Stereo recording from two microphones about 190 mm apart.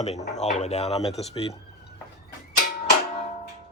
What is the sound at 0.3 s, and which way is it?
Speech, 40° left (ahead or behind).